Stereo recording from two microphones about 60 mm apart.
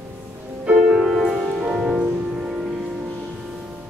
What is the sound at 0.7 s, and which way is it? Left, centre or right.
Music, right.